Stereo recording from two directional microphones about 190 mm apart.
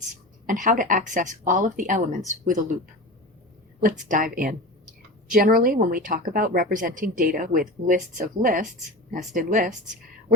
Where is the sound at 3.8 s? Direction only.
45° right (ahead or behind).